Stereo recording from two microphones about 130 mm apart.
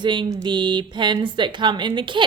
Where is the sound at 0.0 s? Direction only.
35° right (ahead or behind).